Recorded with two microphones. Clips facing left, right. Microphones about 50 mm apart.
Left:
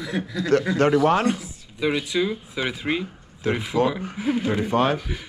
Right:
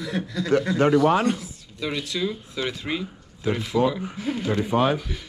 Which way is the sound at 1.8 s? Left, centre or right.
Centre.